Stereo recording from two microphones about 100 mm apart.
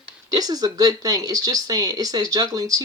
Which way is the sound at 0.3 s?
40° right (ahead or behind).